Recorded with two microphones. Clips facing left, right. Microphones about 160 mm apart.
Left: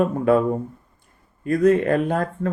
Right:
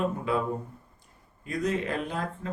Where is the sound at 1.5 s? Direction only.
55° left (ahead or behind).